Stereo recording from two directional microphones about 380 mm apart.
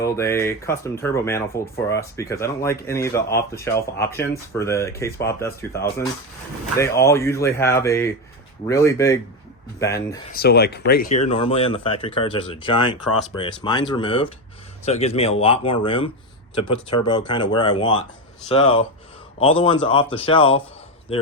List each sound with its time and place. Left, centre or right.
0.0 s speech: centre
3.2 s speech: left
3.6 s speech: centre
10.3 s speech: left